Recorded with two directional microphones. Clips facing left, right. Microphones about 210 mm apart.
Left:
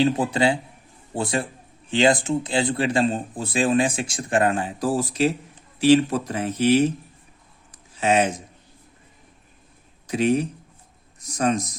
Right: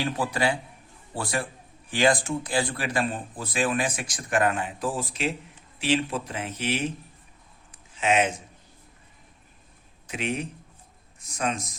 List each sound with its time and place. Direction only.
0.0 s speech: 25° left (ahead or behind); by 6.9 s 40° left (ahead or behind)
7.9 s speech: 35° left (ahead or behind)
10.1 s speech: 40° left (ahead or behind)